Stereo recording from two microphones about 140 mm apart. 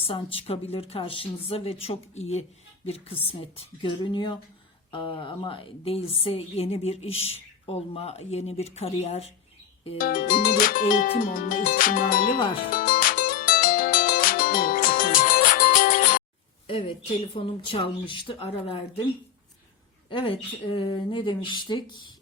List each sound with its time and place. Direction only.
0.0 s a woman's voice: 40° left (ahead or behind)
10.0 s speech: 85° left
12.7 s music: 80° left
16.6 s speech: 40° left (ahead or behind)
20.1 s speech: 40° left (ahead or behind)